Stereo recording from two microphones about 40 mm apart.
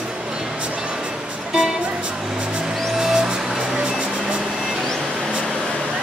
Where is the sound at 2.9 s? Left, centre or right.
Centre.